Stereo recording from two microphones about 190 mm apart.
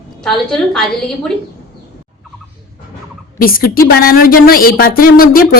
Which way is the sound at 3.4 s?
50° left (ahead or behind).